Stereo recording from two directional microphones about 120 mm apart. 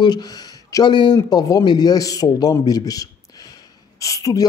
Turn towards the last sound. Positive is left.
turn(degrees=30)  # may be behind; listen again after turning